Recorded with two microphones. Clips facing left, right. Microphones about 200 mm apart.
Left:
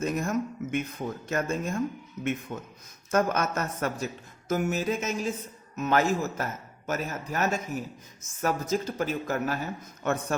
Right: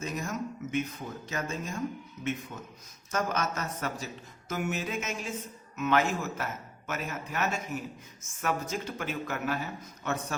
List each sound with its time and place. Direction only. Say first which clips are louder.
0.0 s a man's voice: left 6 dB; 55° left (ahead or behind)
10.0 s speech: left 5 dB; 50° left (ahead or behind)